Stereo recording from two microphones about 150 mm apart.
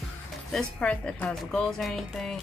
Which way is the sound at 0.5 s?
5° left (ahead or behind).